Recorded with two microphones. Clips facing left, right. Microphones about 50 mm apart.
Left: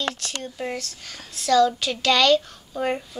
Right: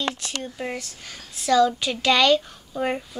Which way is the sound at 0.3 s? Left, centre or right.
Centre.